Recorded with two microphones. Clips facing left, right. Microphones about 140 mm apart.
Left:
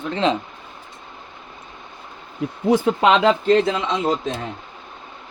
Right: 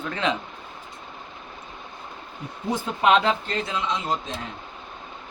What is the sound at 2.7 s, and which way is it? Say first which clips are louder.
Speech: left 4 dB; 85° left.